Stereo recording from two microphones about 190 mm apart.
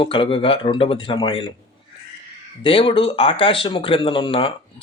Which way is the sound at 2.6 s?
25° left (ahead or behind).